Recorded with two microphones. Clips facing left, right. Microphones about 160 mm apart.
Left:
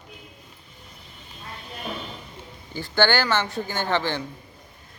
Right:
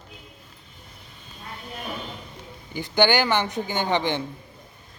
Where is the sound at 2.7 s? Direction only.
15° right (ahead or behind).